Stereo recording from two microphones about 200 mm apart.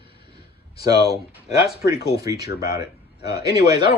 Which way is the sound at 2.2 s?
20° right (ahead or behind).